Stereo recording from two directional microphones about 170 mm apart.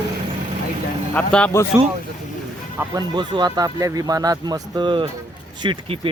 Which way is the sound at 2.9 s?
25° right (ahead or behind).